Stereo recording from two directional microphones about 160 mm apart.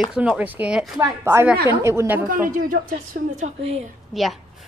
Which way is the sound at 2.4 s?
60° right (ahead or behind).